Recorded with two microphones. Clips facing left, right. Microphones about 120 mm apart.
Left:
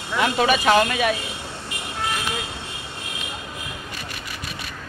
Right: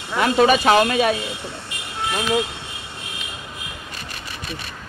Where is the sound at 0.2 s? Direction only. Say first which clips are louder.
Right 4 dB; 40° right (ahead or behind).